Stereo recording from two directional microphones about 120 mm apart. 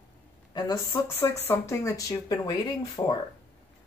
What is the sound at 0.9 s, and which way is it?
Speech, 20° left (ahead or behind).